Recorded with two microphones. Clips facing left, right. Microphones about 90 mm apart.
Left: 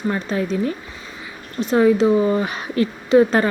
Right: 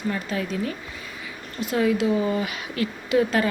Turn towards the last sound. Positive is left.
turn(degrees=35)  # may be behind; listen again after turning